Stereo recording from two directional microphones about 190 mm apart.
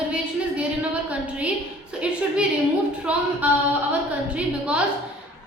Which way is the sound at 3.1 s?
5° right (ahead or behind).